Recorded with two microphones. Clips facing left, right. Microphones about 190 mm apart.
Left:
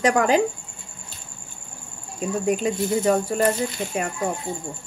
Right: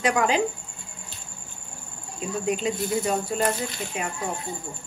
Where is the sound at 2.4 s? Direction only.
50° left (ahead or behind).